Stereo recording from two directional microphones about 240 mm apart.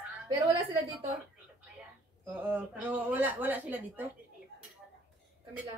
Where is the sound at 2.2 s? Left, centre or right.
Centre.